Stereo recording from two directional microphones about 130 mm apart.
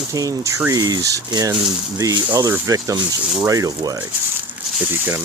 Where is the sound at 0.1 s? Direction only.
25° right (ahead or behind).